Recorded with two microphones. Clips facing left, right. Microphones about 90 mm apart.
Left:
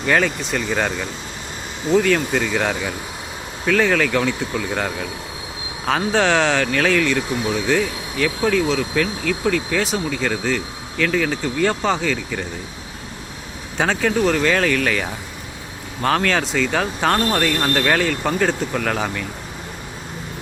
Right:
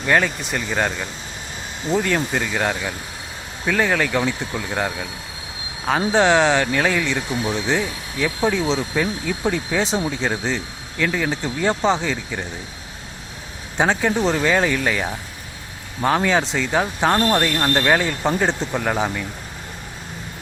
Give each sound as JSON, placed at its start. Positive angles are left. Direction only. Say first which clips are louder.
{"t": 0.0, "sound": "speech", "louder": "even", "side_deg": -5}
{"t": 10.9, "sound": "speech", "louder": "left 2 dB", "side_deg": -10}
{"t": 13.7, "sound": "speech", "louder": "even", "side_deg": -15}